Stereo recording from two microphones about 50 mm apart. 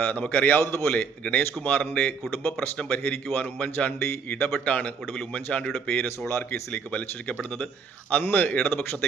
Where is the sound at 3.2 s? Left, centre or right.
Left.